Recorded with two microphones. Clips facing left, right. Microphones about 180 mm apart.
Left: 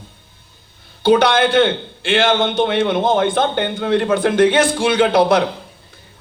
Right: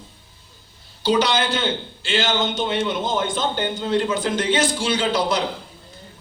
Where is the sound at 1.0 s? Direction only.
55° left (ahead or behind).